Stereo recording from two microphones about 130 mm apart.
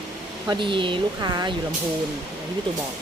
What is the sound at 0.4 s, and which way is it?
Speech, 40° right (ahead or behind).